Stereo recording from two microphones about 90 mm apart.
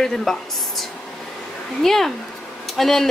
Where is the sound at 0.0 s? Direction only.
5° left (ahead or behind).